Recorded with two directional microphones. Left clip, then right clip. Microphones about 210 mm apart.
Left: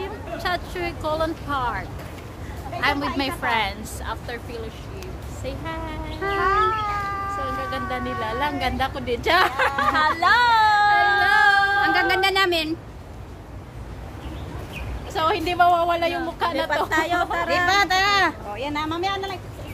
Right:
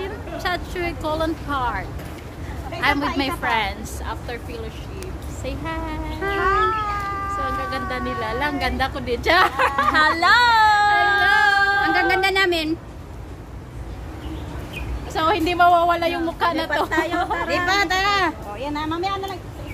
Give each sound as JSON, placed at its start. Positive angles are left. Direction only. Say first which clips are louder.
{"t": 0.0, "sound": "a woman's voice", "louder": "right 1 dB", "side_deg": 5}
{"t": 5.4, "sound": "a woman's voice", "louder": "right 2 dB", "side_deg": -10}
{"t": 6.4, "sound": "cat", "louder": "right 1 dB", "side_deg": 15}
{"t": 7.4, "sound": "a woman's voice", "louder": "right 2 dB", "side_deg": -10}
{"t": 9.9, "sound": "a sound", "louder": "right 3 dB", "side_deg": -20}
{"t": 11.8, "sound": "speech", "louder": "right 1 dB", "side_deg": 20}
{"t": 15.1, "sound": "a woman's voice", "louder": "right 2 dB", "side_deg": -15}
{"t": 16.9, "sound": "speech", "louder": "even", "side_deg": 55}
{"t": 17.6, "sound": "a child's voice", "louder": "even", "side_deg": 10}